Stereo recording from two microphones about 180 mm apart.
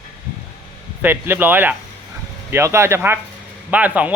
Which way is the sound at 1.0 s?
10° right (ahead or behind).